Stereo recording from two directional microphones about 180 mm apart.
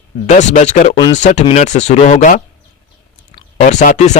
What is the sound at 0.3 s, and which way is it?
A man's voice, 40° left (ahead or behind).